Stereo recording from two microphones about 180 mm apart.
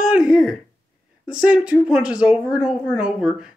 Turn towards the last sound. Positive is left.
turn(degrees=-5)  # may be behind; listen again after turning